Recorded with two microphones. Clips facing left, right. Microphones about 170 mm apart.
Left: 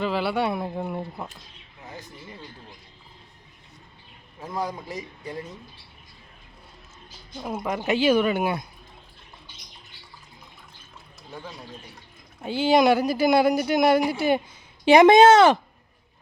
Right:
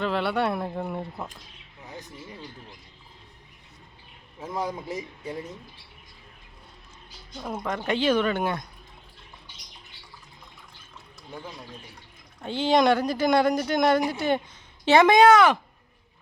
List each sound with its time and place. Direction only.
0.0 s speech: centre (ahead or behind)
7.3 s speech: 10° left (ahead or behind)
12.4 s speech: 10° left (ahead or behind)
14.8 s speech: 20° left (ahead or behind)